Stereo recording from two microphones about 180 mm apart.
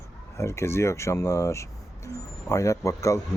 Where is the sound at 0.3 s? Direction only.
15° left (ahead or behind).